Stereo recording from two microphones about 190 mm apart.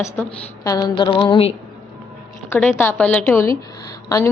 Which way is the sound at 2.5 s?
10° left (ahead or behind).